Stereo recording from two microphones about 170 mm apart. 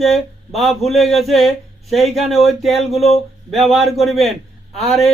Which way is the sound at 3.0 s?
35° left (ahead or behind).